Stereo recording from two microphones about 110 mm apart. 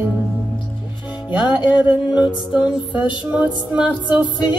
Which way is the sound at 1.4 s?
45° left (ahead or behind).